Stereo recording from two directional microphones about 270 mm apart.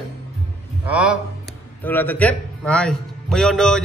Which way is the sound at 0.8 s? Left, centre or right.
Centre.